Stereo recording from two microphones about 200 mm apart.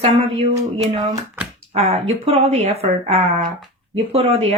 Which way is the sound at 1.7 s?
30° right (ahead or behind).